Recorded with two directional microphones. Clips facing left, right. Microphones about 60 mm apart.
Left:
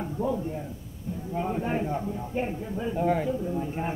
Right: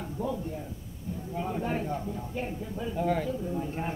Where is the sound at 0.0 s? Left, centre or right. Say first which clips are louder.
Left 4 dB; centre.